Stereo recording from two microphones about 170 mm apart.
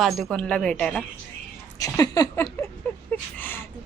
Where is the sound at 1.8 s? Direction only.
20° left (ahead or behind).